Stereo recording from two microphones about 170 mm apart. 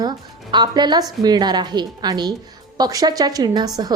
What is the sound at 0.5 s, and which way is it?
A woman's voice, 25° right (ahead or behind).